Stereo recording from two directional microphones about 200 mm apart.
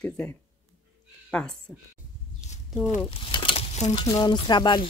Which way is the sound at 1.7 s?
5° right (ahead or behind).